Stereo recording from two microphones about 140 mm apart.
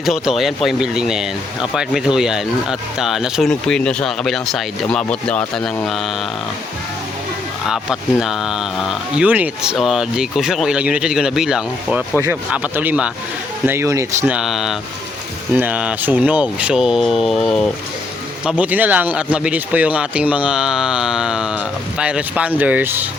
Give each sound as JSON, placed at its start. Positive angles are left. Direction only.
{"t": 0.0, "sound": "speech", "side_deg": 0}
{"t": 7.7, "sound": "speech", "side_deg": -5}
{"t": 14.3, "sound": "speech", "side_deg": -5}
{"t": 18.4, "sound": "speech", "side_deg": -10}